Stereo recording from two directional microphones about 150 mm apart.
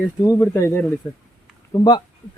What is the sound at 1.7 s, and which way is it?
Speech, 25° left (ahead or behind).